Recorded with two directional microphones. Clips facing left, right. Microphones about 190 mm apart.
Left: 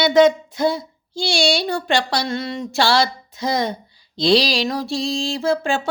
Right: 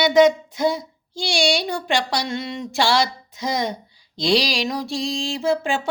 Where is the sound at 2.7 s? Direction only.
15° right (ahead or behind).